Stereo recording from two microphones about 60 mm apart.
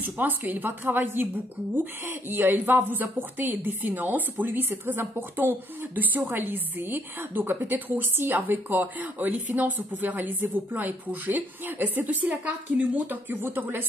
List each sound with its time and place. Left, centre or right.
0.5 s a woman's voice: right